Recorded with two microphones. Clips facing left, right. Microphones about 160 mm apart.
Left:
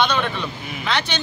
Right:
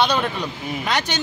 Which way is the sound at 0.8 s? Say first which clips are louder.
Even; 45° right (ahead or behind).